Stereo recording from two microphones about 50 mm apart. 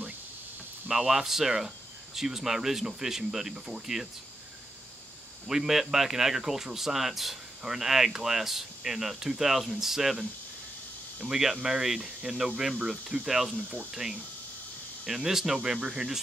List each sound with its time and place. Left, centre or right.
0.8 s speech: centre
5.5 s speech: centre
11.2 s speech: centre
15.0 s speech: centre